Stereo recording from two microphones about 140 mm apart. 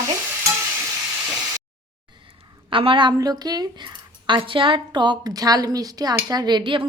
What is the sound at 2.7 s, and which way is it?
A woman's voice, 40° right (ahead or behind).